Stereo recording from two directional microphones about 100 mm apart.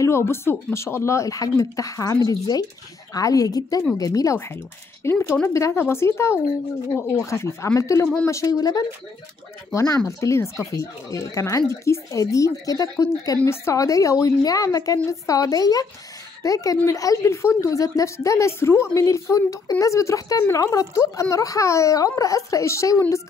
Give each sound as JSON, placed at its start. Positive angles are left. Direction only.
{"t": 0.0, "sound": "a woman's voice", "side_deg": 25}